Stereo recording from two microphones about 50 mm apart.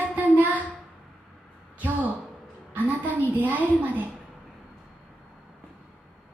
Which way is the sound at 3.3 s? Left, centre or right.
Right.